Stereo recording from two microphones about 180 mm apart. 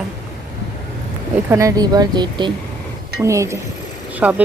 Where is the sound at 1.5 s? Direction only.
20° right (ahead or behind).